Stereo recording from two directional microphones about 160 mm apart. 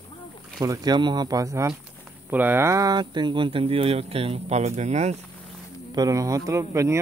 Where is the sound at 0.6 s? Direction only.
25° right (ahead or behind); by 5.1 s 45° right (ahead or behind).